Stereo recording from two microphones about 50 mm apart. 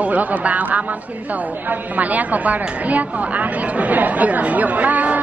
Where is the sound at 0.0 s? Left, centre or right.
Right.